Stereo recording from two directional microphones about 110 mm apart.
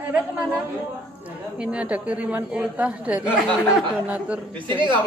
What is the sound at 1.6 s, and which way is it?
A woman's voice, 10° right (ahead or behind).